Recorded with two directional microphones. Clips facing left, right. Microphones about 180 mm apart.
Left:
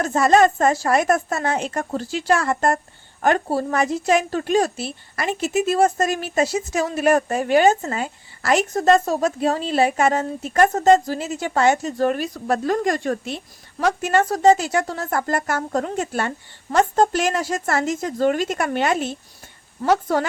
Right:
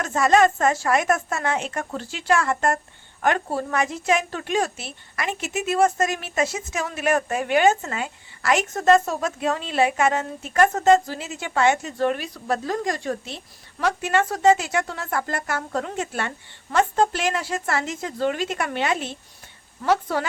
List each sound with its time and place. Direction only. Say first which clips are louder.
0.0 s a woman's voice: left 2 dB; 35° left (ahead or behind); by 13.3 s 55° left (ahead or behind)
13.7 s a woman's voice: left 3 dB; 40° left (ahead or behind)